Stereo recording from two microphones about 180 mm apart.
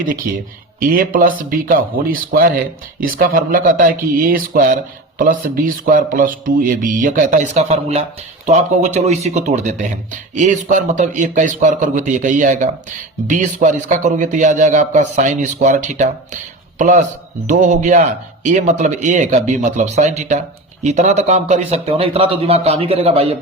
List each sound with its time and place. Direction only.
0.8 s a man's voice: 50° right (ahead or behind); by 23.3 s 30° right (ahead or behind)